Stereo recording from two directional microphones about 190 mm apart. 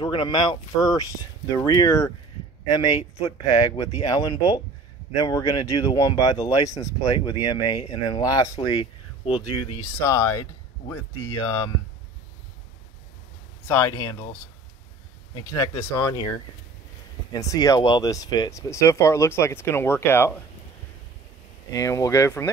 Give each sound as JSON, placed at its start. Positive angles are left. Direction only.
{"t": 0.0, "sound": "speech", "side_deg": 25}
{"t": 10.0, "sound": "speech", "side_deg": 15}
{"t": 13.7, "sound": "speech", "side_deg": 15}
{"t": 15.6, "sound": "speech", "side_deg": 15}
{"t": 17.3, "sound": "speech", "side_deg": 20}
{"t": 21.7, "sound": "speech", "side_deg": 15}